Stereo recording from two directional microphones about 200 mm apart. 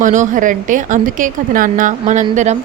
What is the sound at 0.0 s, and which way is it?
A woman's voice, 40° right (ahead or behind).